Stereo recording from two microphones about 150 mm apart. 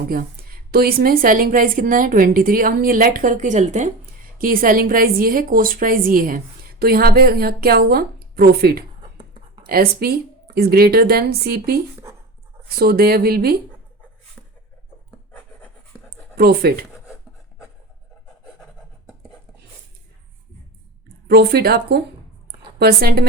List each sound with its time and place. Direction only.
0.1 s a woman's voice: 85° right; by 3.8 s 55° right (ahead or behind)
4.4 s a woman's voice: 70° right (ahead or behind); by 13.6 s 90° right
16.3 s speech: 90° right
21.2 s speech: 90° right